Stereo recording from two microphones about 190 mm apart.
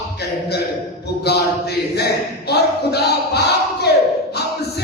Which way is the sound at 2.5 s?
60° left (ahead or behind).